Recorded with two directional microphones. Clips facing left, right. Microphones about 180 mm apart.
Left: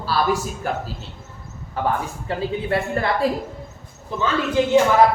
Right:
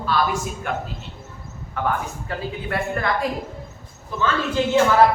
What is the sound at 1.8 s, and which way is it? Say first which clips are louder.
Speech: left 1 dB; 30° left (ahead or behind).